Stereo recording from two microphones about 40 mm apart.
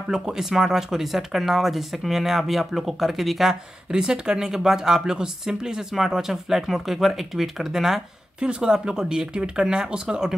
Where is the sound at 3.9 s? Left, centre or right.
Centre.